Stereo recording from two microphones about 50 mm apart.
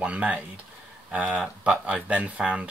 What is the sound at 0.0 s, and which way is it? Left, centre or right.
Speech, right.